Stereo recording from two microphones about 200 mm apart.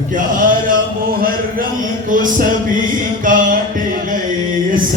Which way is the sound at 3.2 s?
40° right (ahead or behind).